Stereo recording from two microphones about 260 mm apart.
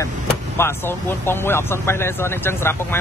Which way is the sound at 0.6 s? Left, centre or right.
Centre.